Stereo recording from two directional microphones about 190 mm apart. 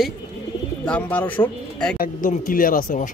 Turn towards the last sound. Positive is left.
turn(degrees=45)  # may be behind; listen again after turning